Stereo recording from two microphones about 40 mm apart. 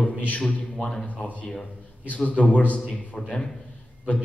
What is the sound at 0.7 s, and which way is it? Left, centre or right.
Speech, centre.